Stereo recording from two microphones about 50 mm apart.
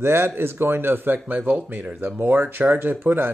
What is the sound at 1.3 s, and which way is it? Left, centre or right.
Speech, right.